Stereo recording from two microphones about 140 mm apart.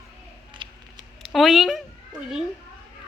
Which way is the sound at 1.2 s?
Centre (ahead or behind).